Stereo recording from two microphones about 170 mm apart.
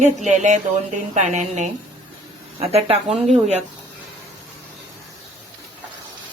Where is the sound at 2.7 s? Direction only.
35° right (ahead or behind).